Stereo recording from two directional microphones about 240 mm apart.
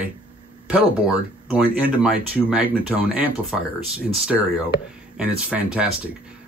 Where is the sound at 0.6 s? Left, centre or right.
Centre.